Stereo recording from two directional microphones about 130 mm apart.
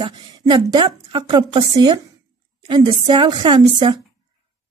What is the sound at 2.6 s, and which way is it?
A woman's voice, 35° right (ahead or behind).